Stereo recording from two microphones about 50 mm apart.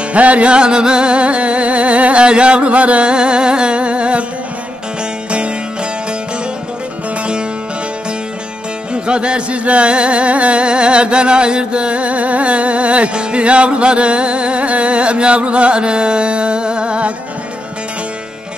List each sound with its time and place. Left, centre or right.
0.1 s music: right
8.9 s music: centre